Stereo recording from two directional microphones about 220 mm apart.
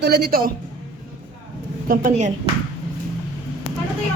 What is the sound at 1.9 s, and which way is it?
Speech, 35° right (ahead or behind).